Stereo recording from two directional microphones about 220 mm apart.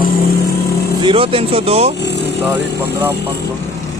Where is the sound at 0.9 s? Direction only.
20° right (ahead or behind).